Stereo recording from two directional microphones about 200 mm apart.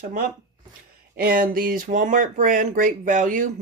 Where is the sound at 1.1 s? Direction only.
45° right (ahead or behind).